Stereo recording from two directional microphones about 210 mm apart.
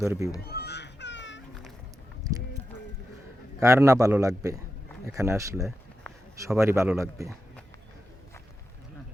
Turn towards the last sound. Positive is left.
turn(degrees=-15)  # may be behind; listen again after turning